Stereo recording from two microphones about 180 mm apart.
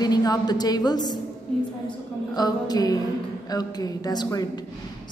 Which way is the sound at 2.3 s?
20° left (ahead or behind).